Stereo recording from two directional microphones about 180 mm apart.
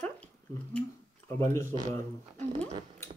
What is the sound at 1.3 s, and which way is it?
Speech, 15° left (ahead or behind).